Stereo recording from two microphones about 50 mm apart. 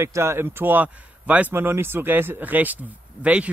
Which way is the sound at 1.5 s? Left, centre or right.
Right.